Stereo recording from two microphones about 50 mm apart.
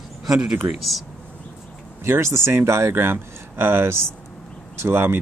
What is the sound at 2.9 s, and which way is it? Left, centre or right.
Speech, right.